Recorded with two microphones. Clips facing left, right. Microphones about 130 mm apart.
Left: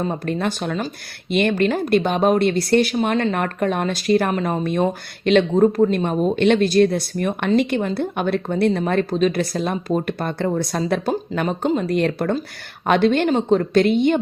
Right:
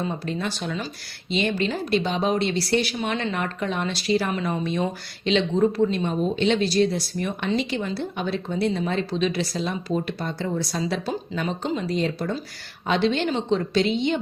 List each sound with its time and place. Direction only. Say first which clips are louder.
0.0 s speech: left 5 dB; 50° left (ahead or behind)